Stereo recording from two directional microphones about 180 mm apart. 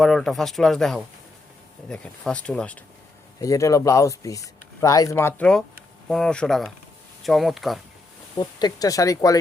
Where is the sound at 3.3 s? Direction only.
20° left (ahead or behind); by 7.8 s centre (ahead or behind).